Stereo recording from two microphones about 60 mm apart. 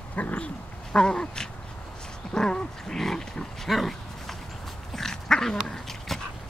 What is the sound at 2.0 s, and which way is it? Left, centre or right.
Pig, centre.